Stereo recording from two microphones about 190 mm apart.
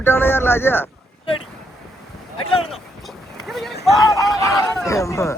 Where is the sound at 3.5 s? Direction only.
Centre (ahead or behind).